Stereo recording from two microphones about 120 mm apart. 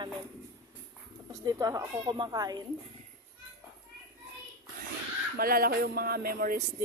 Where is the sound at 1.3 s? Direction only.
30° right (ahead or behind).